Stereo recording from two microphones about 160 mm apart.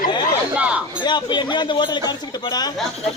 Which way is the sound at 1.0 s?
30° left (ahead or behind).